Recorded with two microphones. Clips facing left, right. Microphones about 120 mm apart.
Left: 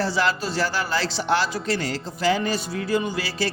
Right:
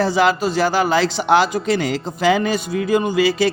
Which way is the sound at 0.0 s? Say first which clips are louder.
Right 7 dB; 55° right (ahead or behind).